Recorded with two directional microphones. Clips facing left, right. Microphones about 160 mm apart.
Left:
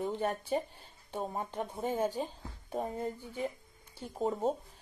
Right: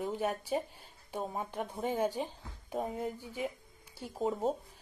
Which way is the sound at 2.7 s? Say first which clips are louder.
Even; 5° right (ahead or behind).